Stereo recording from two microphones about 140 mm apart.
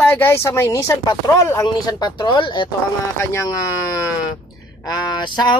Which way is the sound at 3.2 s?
20° left (ahead or behind).